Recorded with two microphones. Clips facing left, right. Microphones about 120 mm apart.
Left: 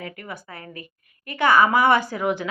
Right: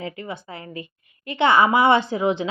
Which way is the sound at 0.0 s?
25° right (ahead or behind).